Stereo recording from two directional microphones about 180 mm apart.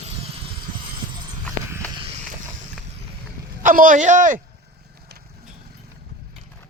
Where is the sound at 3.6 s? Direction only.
50° right (ahead or behind).